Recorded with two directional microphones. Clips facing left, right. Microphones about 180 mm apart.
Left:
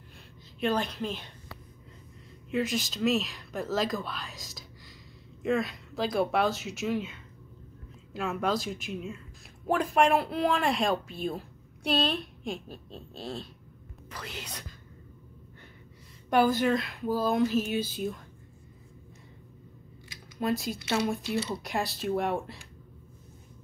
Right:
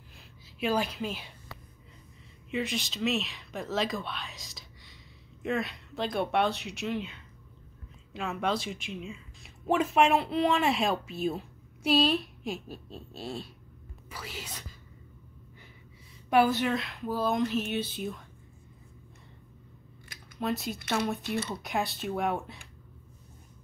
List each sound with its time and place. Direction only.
0.6 s a woman's voice: 5° right (ahead or behind)
2.5 s speech: centre (ahead or behind)
16.3 s speech: centre (ahead or behind)
20.3 s speech: centre (ahead or behind)
21.2 s speech: 55° right (ahead or behind)
21.6 s speech: centre (ahead or behind)